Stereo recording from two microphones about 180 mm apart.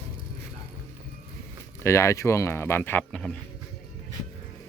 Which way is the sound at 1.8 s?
15° left (ahead or behind).